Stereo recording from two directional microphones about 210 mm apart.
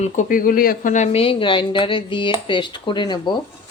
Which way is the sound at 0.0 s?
40° left (ahead or behind).